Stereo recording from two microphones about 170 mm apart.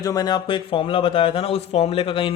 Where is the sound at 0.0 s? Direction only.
20° left (ahead or behind).